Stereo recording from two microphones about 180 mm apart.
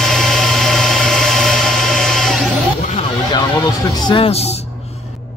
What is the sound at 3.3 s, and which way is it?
Music, 20° left (ahead or behind).